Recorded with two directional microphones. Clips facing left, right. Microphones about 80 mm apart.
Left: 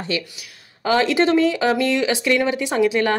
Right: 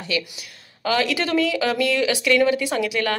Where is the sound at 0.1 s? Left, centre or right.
Left.